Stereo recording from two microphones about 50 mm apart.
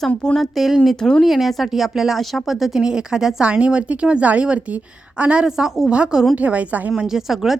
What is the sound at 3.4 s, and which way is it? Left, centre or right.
A woman's voice, right.